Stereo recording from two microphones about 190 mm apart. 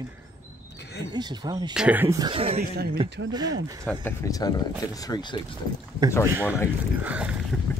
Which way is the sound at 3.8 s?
15° left (ahead or behind).